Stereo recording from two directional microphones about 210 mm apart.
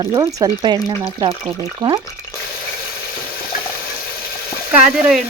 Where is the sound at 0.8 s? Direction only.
15° left (ahead or behind).